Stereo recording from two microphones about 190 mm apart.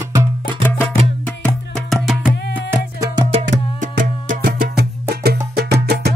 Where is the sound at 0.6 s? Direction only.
10° left (ahead or behind); by 3.1 s 10° right (ahead or behind).